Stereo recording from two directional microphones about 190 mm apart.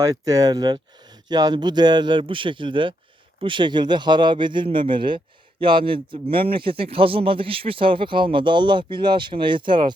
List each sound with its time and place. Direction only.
0.0 s speech: 20° right (ahead or behind)